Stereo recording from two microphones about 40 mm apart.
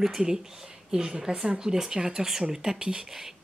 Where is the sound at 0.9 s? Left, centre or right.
Centre.